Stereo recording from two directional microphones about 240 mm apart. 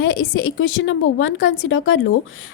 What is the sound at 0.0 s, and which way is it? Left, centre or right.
A woman's voice, left.